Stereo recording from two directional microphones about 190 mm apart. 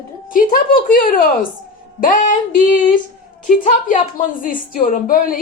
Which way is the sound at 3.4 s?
45° left (ahead or behind).